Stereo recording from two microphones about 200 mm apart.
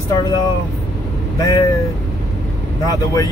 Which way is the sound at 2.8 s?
20° left (ahead or behind).